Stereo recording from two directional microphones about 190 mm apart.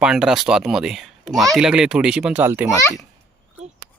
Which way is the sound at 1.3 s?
20° right (ahead or behind).